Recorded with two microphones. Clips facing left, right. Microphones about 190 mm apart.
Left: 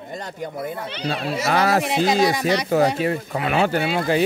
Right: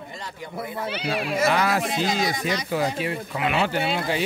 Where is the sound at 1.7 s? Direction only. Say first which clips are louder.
Left 5 dB; 70° left (ahead or behind).